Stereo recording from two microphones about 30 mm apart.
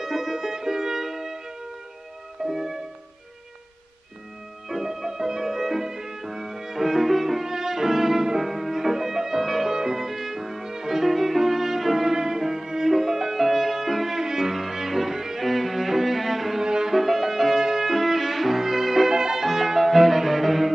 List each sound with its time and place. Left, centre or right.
0.0 s music: centre
2.4 s music: centre
4.6 s music: centre
10.7 s violin: centre
12.9 s music: centre
14.2 s cello: centre
15.4 s cello: centre
16.6 s music: right
16.9 s music: centre
17.9 s music: centre
19.0 s music: centre